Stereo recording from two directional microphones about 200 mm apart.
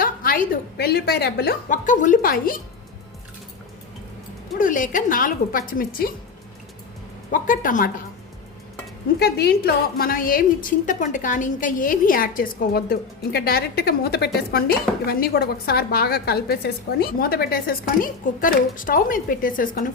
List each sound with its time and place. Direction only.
0.0 s a woman's voice: 45° left (ahead or behind)
4.5 s a woman's voice: 40° left (ahead or behind)
7.3 s a woman's voice: 45° left (ahead or behind)
9.1 s a woman's voice: 55° left (ahead or behind)